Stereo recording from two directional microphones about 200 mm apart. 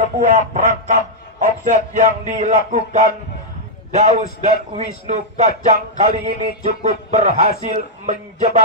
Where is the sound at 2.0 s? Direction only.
35° right (ahead or behind).